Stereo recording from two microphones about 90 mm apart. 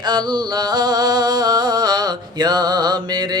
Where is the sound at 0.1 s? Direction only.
50° right (ahead or behind).